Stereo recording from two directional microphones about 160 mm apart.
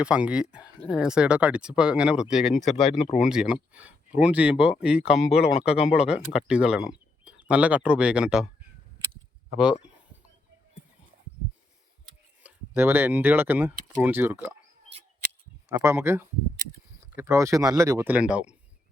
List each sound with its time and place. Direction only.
0.0 s speech: 5° right (ahead or behind)
12.4 s speech: 10° right (ahead or behind)
15.7 s speech: 15° right (ahead or behind)
18.1 s speech: 10° right (ahead or behind)